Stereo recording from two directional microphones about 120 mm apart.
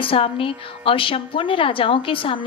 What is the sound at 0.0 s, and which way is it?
A woman's voice, 50° left (ahead or behind).